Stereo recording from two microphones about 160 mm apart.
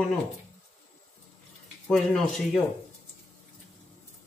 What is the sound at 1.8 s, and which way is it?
Speech, 5° left (ahead or behind).